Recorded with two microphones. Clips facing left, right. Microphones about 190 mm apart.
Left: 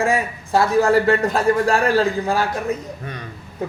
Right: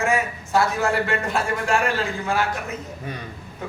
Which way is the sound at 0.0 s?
35° left (ahead or behind).